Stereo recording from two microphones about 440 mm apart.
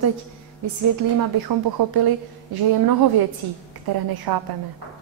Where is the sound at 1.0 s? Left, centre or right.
Right.